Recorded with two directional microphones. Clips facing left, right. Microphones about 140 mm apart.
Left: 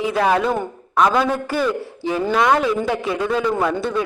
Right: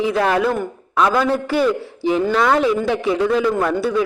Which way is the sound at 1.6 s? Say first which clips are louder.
Right 3 dB; 15° right (ahead or behind).